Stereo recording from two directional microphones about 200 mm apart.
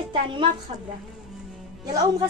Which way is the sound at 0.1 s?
25° right (ahead or behind).